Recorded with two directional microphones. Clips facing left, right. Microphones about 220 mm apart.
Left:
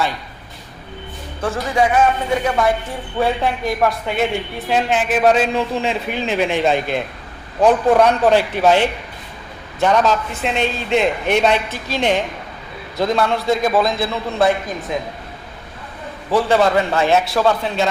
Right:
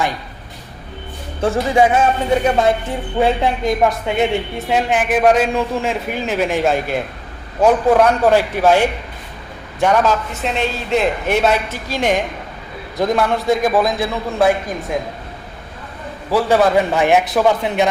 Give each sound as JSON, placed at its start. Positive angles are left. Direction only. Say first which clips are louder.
{"t": 1.4, "sound": "a woman's voice", "louder": "right 4 dB", "side_deg": -25}
{"t": 16.3, "sound": "a woman's voice", "louder": "right 1 dB", "side_deg": -10}